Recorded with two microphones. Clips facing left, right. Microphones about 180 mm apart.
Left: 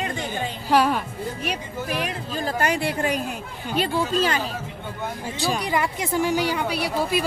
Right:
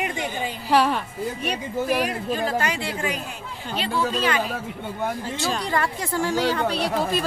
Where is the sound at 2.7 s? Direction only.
60° left (ahead or behind).